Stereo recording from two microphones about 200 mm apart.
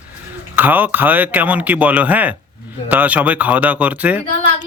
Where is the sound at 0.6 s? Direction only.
10° right (ahead or behind).